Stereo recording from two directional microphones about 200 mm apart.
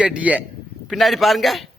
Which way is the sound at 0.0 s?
5° right (ahead or behind).